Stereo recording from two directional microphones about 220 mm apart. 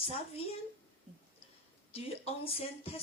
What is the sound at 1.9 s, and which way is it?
Speech, 25° left (ahead or behind).